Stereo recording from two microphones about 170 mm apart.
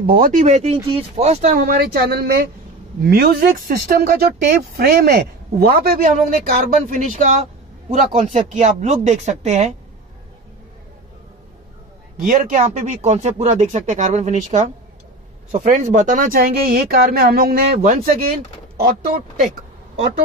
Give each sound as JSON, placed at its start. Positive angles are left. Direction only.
{"t": 0.0, "sound": "speech", "side_deg": -55}
{"t": 6.3, "sound": "speech", "side_deg": -45}
{"t": 12.2, "sound": "speech", "side_deg": -55}